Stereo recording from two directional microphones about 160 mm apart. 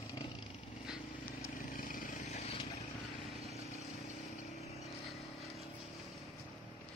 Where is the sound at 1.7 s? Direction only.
55° left (ahead or behind).